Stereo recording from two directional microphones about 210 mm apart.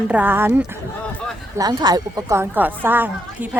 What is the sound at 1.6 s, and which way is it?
Speech, 20° right (ahead or behind).